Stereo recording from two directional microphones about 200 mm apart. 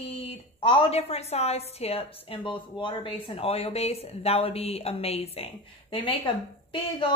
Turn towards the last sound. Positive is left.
turn(degrees=25)  # may be behind; listen again after turning